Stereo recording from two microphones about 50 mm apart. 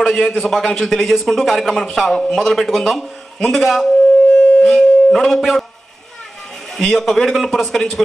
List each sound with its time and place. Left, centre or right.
0.0 s a man's voice: centre
3.3 s a man's voice: centre
3.6 s a man's voice: centre
4.4 s dog: left
5.1 s a man's voice: centre
6.7 s a man's voice: centre